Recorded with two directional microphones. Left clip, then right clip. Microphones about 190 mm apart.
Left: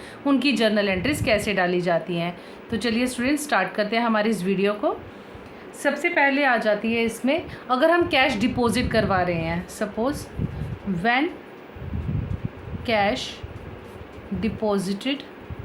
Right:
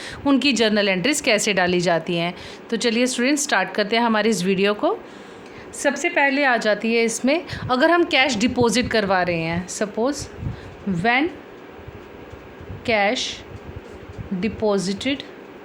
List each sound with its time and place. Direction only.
0.0 s a woman's voice: 55° right (ahead or behind)
12.8 s a woman's voice: 40° right (ahead or behind)
14.4 s a woman's voice: 40° right (ahead or behind)